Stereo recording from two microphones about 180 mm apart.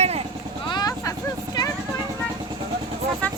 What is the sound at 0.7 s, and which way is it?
Vehicle, 20° left (ahead or behind).